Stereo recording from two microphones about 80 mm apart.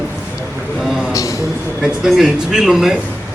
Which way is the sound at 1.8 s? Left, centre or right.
Centre.